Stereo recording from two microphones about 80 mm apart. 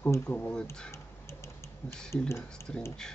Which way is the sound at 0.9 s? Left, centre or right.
Left.